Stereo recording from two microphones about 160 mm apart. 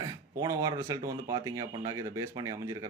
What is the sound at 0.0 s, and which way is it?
Speech, 20° right (ahead or behind).